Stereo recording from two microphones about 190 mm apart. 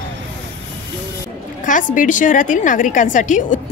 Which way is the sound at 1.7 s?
45° left (ahead or behind).